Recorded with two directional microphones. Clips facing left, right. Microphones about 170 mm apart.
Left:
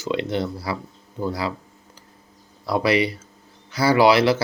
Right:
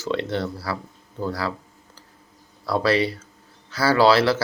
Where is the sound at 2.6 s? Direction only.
15° left (ahead or behind).